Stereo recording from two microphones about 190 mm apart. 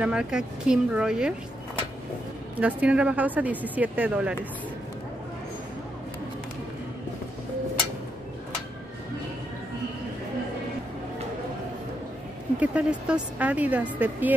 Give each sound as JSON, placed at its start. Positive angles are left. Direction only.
{"t": 0.0, "sound": "speech", "side_deg": -5}
{"t": 2.6, "sound": "speech", "side_deg": -5}
{"t": 12.5, "sound": "speech", "side_deg": -5}